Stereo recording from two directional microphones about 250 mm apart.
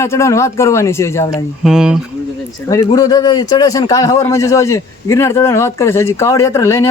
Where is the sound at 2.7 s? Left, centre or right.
Centre.